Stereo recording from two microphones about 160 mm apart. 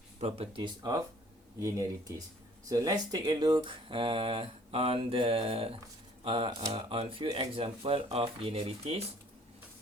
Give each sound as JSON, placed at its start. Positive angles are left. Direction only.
{"t": 0.2, "sound": "speech", "side_deg": -40}